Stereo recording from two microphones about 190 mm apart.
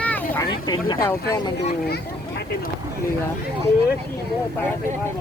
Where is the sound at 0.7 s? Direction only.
20° left (ahead or behind).